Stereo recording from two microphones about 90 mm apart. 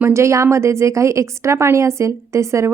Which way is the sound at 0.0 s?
30° right (ahead or behind).